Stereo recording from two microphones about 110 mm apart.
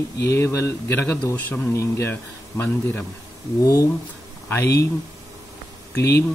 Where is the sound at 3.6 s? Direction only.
30° left (ahead or behind).